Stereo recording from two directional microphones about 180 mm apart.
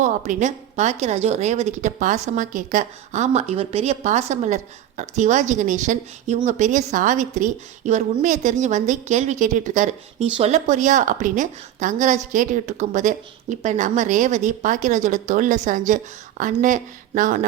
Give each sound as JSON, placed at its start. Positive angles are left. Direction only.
{"t": 0.0, "sound": "a woman's voice", "side_deg": -45}